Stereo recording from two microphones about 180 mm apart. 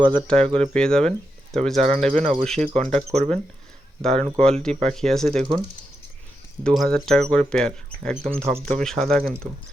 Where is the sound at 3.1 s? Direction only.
40° right (ahead or behind).